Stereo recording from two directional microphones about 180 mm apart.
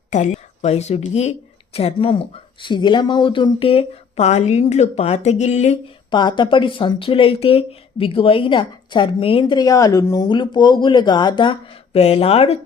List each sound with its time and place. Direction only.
0.1 s speech: 40° left (ahead or behind)
6.1 s speech: 25° left (ahead or behind)